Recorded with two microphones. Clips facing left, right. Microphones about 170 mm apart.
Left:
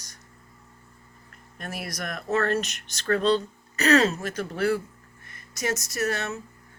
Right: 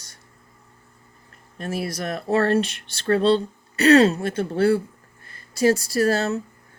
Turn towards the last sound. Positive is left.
turn(degrees=-35)  # may be behind; listen again after turning